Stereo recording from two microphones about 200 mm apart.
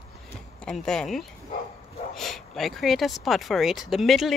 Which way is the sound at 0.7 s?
5° left (ahead or behind).